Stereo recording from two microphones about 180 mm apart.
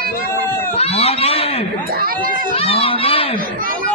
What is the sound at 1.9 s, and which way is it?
Speech, 55° right (ahead or behind).